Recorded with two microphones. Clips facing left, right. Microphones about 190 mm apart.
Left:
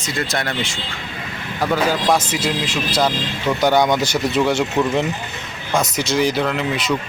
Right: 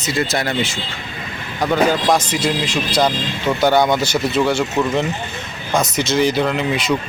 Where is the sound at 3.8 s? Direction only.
5° right (ahead or behind).